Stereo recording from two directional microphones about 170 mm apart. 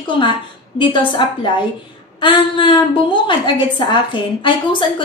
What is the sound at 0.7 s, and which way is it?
A woman's voice, 30° left (ahead or behind).